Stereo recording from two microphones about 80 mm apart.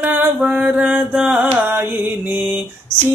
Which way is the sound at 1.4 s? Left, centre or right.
Right.